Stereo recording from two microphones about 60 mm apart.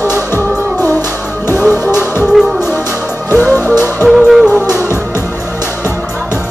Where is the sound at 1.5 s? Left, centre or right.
Left.